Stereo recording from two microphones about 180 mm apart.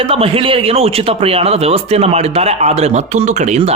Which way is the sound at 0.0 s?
30° right (ahead or behind).